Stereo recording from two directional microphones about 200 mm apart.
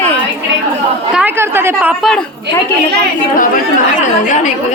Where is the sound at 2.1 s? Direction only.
5° left (ahead or behind).